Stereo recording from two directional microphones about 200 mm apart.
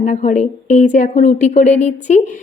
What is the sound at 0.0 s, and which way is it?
A woman's voice, 35° left (ahead or behind).